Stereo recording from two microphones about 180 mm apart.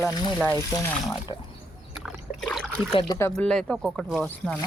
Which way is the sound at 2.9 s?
30° left (ahead or behind).